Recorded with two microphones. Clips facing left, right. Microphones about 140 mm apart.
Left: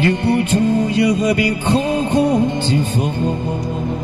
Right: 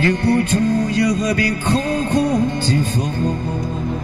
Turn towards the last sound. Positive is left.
turn(degrees=15)  # may be behind; listen again after turning